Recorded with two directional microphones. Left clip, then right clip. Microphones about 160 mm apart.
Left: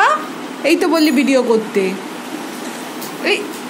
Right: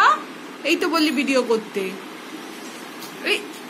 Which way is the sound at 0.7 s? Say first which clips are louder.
Left 6 dB; 40° left (ahead or behind).